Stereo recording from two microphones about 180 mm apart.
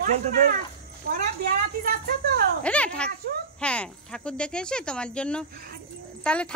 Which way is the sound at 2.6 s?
5° left (ahead or behind).